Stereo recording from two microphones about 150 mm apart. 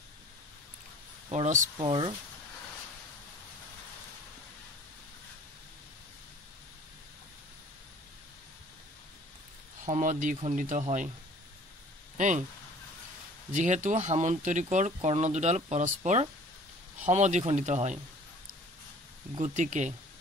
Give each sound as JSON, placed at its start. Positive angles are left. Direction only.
{"t": 1.3, "sound": "speech", "side_deg": -55}
{"t": 1.8, "sound": "speech", "side_deg": -35}
{"t": 9.8, "sound": "speech", "side_deg": -55}
{"t": 12.2, "sound": "speech", "side_deg": -55}
{"t": 13.5, "sound": "speech", "side_deg": -55}
{"t": 19.3, "sound": "speech", "side_deg": -55}